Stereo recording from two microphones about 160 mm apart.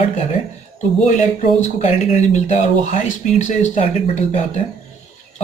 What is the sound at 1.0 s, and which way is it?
Speech, 50° left (ahead or behind).